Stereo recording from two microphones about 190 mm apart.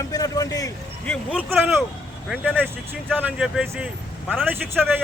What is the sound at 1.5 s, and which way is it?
Speech, 10° right (ahead or behind).